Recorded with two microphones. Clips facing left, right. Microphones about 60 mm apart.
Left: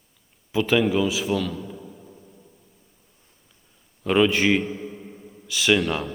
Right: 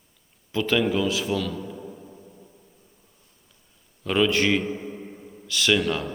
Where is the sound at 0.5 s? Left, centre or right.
Centre.